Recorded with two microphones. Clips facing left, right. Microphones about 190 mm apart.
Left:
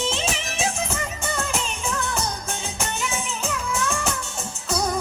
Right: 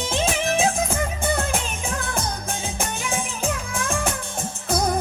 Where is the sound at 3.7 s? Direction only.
55° right (ahead or behind).